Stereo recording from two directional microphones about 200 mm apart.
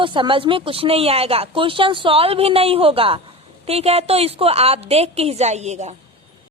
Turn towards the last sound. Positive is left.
turn(degrees=-35)  # may be behind; listen again after turning